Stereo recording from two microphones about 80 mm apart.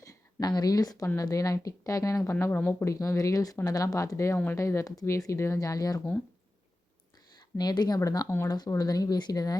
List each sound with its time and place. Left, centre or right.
0.0 s speech: left
2.3 s speech: left
2.9 s speech: left
7.3 s speech: left